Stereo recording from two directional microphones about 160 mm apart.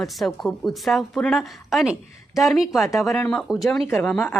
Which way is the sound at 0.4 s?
Centre (ahead or behind).